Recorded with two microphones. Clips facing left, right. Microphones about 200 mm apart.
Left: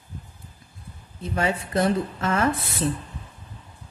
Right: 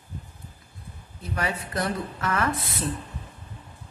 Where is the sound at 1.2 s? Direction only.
25° left (ahead or behind).